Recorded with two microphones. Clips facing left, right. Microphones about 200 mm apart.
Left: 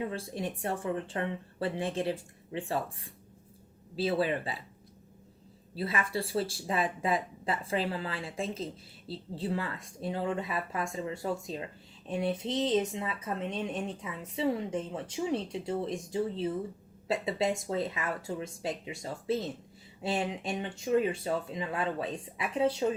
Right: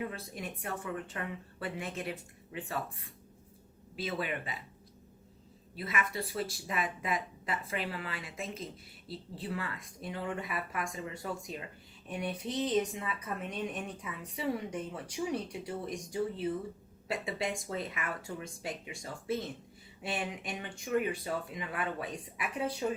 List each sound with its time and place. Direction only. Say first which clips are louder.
0.0 s speech: left 5 dB; 30° left (ahead or behind)
5.7 s speech: left 3 dB; 30° left (ahead or behind)